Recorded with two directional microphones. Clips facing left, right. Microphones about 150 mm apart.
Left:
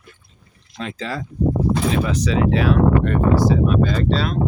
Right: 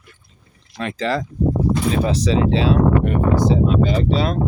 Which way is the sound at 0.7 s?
70° right (ahead or behind).